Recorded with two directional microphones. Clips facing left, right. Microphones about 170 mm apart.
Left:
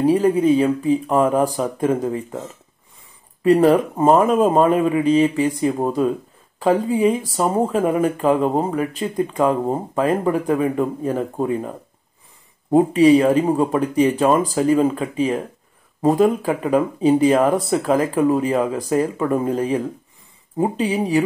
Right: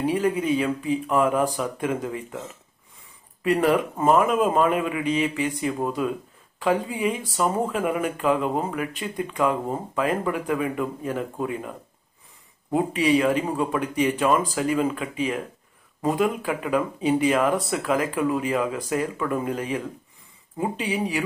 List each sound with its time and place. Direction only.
0.0 s speech: 35° left (ahead or behind)
3.4 s speech: 35° left (ahead or behind)
12.7 s speech: 35° left (ahead or behind)